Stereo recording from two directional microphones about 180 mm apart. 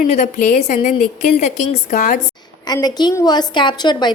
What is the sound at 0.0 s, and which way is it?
A woman's voice, 40° left (ahead or behind).